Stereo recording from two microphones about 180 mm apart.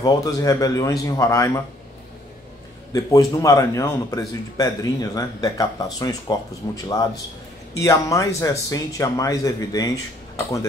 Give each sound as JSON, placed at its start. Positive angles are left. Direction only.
{"t": 0.0, "sound": "speech", "side_deg": 20}
{"t": 2.9, "sound": "speech", "side_deg": 20}
{"t": 7.8, "sound": "speech", "side_deg": 20}